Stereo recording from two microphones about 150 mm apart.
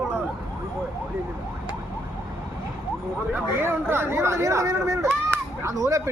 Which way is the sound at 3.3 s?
15° right (ahead or behind).